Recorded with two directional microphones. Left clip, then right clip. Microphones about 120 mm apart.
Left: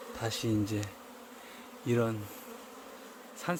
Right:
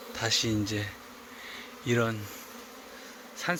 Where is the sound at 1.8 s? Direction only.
15° left (ahead or behind).